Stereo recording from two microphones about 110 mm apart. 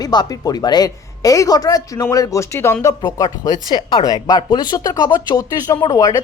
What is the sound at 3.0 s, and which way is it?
Speech, 35° left (ahead or behind).